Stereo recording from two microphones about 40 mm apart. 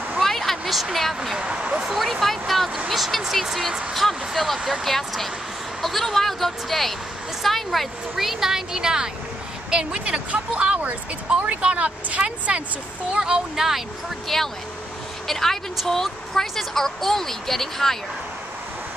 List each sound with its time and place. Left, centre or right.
0.2 s a sound: centre
0.9 s speech: centre
1.5 s speech: right
1.9 s speech: centre; by 12.6 s right
13.1 s speech: centre
13.6 s speech: centre
14.2 s speech: centre